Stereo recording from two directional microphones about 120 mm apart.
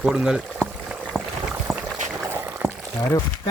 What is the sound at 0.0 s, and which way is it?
Speech, 5° right (ahead or behind).